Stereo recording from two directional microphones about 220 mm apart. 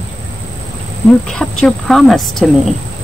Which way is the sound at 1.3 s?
5° left (ahead or behind).